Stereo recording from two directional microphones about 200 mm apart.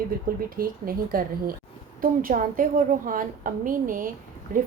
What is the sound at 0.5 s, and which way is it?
A woman's voice, 45° right (ahead or behind).